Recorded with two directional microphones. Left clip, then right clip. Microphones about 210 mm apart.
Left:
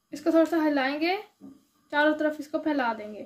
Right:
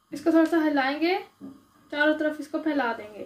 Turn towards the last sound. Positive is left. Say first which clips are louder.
# right 1 dB
turn(degrees=55)  # may be behind; listen again after turning